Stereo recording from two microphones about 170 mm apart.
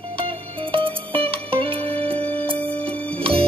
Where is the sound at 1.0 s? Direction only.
10° left (ahead or behind).